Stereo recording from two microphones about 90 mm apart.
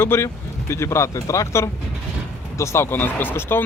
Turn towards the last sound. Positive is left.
turn(degrees=25)  # may be behind; listen again after turning